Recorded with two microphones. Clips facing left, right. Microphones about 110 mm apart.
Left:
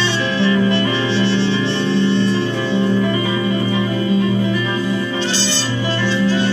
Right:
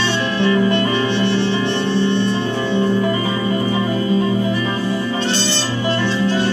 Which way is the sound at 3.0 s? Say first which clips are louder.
Even; 40° right (ahead or behind).